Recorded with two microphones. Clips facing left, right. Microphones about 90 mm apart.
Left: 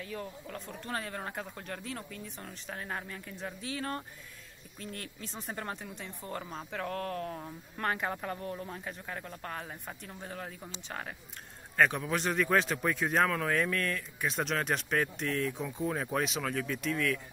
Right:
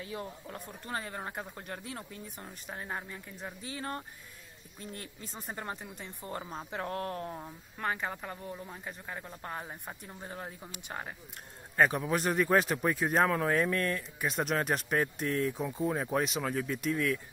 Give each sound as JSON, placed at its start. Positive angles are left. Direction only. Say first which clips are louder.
{"t": 0.0, "sound": "speech", "louder": "even", "side_deg": -25}
{"t": 0.6, "sound": "speech", "louder": "left 1 dB", "side_deg": -10}
{"t": 6.3, "sound": "speech", "louder": "right 1 dB", "side_deg": -20}
{"t": 7.3, "sound": "speech", "louder": "left 2 dB", "side_deg": -5}
{"t": 13.3, "sound": "speech", "louder": "right 2 dB", "side_deg": -15}
{"t": 14.2, "sound": "speech", "louder": "right 1 dB", "side_deg": -5}
{"t": 15.0, "sound": "speech", "louder": "right 2 dB", "side_deg": -15}